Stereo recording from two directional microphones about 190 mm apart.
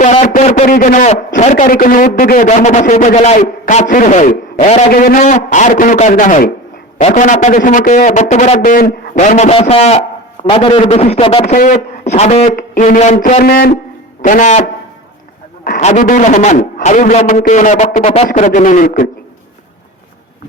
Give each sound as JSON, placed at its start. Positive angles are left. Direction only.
{"t": 0.0, "sound": "a man's voice", "side_deg": 40}
{"t": 15.6, "sound": "a man's voice", "side_deg": 45}